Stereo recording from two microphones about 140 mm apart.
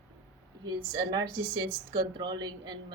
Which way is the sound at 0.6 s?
30° right (ahead or behind).